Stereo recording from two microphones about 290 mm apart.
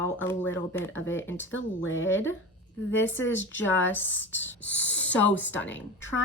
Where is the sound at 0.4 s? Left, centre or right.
Left.